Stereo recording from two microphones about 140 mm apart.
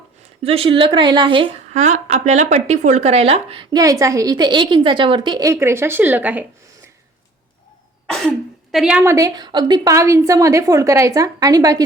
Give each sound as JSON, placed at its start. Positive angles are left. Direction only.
{"t": 0.4, "sound": "speech", "side_deg": -45}
{"t": 1.7, "sound": "speech", "side_deg": -55}
{"t": 5.5, "sound": "speech", "side_deg": -20}
{"t": 8.0, "sound": "throat clearing", "side_deg": 5}
{"t": 9.0, "sound": "a woman's voice", "side_deg": -25}